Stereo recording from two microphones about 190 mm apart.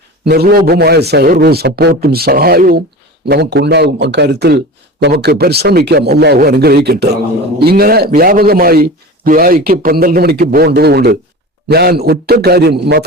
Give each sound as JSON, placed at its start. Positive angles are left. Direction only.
{"t": 0.3, "sound": "a man's voice", "side_deg": -55}